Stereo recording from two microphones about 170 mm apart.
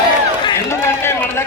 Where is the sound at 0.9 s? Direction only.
15° left (ahead or behind).